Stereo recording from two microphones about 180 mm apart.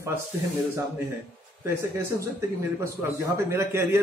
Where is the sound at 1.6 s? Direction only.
15° right (ahead or behind).